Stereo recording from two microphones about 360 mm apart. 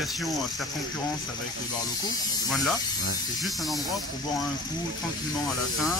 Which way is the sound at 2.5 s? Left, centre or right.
Centre.